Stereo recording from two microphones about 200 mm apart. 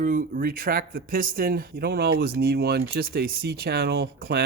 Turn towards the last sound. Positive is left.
turn(degrees=-50)  # may be behind; listen again after turning